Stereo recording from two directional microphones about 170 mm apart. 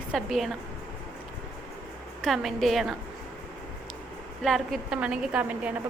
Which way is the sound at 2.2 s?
Centre (ahead or behind).